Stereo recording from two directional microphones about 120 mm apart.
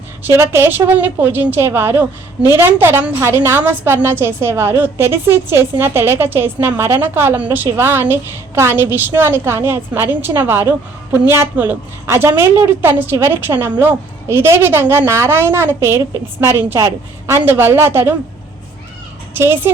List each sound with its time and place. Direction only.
0.3 s a woman's voice: 20° right (ahead or behind)
19.3 s speech: 20° right (ahead or behind)